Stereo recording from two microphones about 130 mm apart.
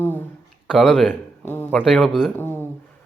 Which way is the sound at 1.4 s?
15° left (ahead or behind).